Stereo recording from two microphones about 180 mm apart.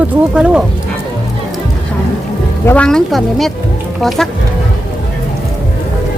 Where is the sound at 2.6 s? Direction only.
10° left (ahead or behind).